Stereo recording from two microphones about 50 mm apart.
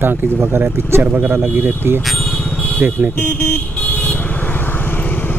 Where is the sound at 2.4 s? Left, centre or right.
Left.